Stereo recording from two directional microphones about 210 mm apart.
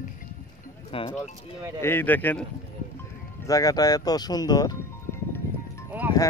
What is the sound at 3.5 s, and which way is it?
Speech, 15° left (ahead or behind).